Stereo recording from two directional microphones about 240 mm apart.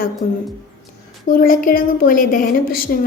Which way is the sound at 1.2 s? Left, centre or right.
Left.